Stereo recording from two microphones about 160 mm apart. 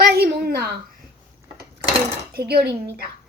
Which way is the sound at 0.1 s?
80° right.